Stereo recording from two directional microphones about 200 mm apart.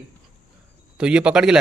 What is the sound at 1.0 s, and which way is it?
Speech, 5° right (ahead or behind).